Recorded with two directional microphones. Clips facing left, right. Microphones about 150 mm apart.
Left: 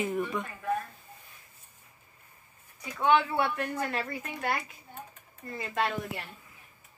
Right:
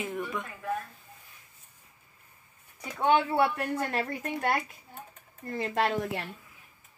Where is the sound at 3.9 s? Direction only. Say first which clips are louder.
Right 3 dB; 55° right (ahead or behind).